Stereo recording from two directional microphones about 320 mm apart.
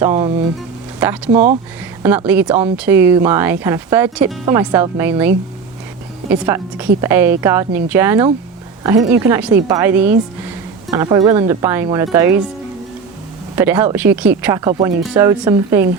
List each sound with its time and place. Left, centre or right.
0.0 s speech: centre
1.3 s speech: right
2.0 s speech: centre
6.3 s speech: centre
13.6 s speech: centre